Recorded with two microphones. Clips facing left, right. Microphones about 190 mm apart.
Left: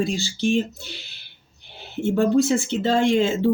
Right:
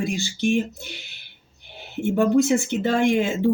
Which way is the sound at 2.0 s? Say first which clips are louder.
Even; 15° right (ahead or behind).